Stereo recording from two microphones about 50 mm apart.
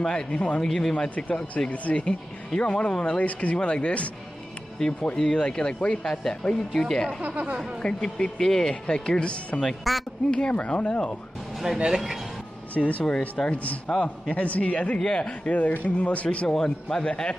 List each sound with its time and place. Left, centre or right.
0.0 s speech: centre
0.7 s speech: centre
1.1 s speech: left
3.3 s speech: left; by 7.2 s centre
7.2 s speech: right
8.0 s speech: centre
9.6 s a woman's voice: centre
10.3 s speech: left
11.9 s speech: centre
12.7 s speech: left
16.4 s speech: centre